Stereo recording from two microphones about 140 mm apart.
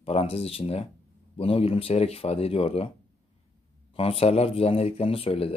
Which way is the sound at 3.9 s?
45° left (ahead or behind).